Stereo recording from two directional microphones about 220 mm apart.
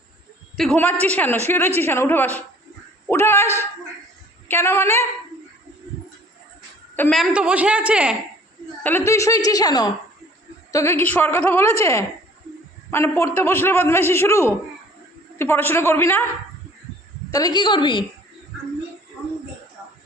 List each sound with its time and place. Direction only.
0.5 s a man's voice: centre (ahead or behind)
6.9 s a woman's voice: 5° left (ahead or behind)
8.8 s a man's voice: 10° left (ahead or behind)
17.3 s a woman's voice: 20° left (ahead or behind)